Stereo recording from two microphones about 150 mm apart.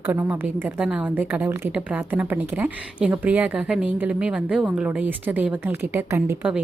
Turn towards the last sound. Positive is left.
turn(degrees=-15)  # may be behind; listen again after turning